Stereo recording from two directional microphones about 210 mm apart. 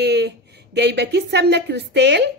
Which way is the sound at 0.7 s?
55° right (ahead or behind).